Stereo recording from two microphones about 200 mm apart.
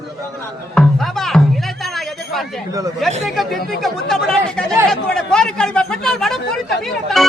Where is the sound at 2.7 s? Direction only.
15° right (ahead or behind).